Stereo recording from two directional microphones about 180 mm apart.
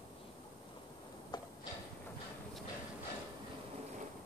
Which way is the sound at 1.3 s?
25° left (ahead or behind).